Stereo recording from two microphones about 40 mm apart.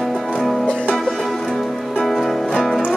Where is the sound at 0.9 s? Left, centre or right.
Centre.